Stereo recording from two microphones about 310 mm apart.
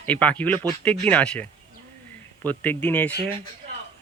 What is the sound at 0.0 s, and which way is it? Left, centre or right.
Speech, centre.